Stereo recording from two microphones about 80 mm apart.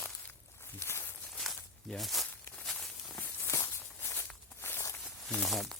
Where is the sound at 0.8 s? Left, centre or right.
Left.